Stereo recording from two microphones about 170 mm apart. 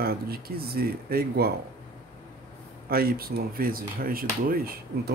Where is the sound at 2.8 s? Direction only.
60° right (ahead or behind).